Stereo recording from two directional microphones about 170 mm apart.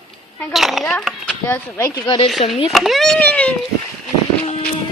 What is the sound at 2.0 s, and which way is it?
Speech, 25° left (ahead or behind).